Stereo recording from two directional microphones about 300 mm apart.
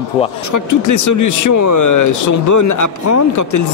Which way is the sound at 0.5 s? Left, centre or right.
Left.